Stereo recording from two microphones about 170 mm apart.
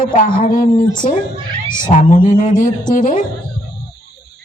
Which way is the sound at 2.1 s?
45° left (ahead or behind).